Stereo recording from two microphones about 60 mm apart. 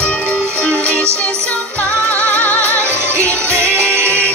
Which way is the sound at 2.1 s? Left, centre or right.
Left.